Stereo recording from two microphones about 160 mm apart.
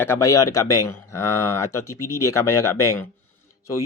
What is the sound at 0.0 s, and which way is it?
Speech, 20° left (ahead or behind).